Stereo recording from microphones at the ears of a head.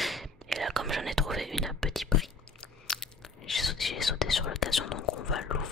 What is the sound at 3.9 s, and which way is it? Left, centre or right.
Whispering, left.